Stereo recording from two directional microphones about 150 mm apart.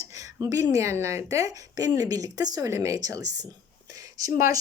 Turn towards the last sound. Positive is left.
turn(degrees=-20)  # may be behind; listen again after turning